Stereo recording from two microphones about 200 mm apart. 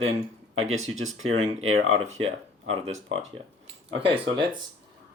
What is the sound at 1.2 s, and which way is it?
Speech, 90° right.